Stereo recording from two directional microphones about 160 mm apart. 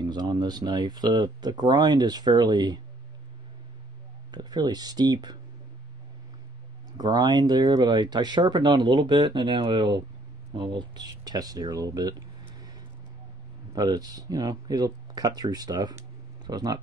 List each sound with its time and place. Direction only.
0.0 s speech: 25° right (ahead or behind)
4.3 s speech: 25° right (ahead or behind)
6.9 s speech: 25° right (ahead or behind)
13.7 s speech: 25° right (ahead or behind)